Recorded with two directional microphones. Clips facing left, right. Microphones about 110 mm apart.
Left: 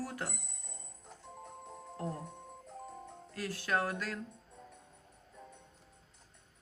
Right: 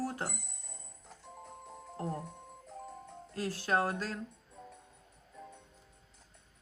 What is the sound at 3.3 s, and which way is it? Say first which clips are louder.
Speech: right 3 dB; 30° right (ahead or behind).